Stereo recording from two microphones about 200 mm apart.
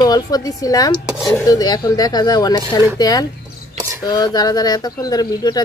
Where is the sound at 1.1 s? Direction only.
5° right (ahead or behind).